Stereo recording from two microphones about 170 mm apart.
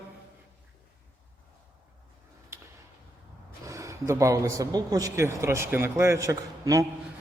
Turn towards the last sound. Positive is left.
turn(degrees=-20)  # may be behind; listen again after turning